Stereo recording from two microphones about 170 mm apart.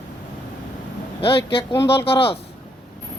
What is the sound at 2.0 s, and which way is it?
Speech, 35° left (ahead or behind).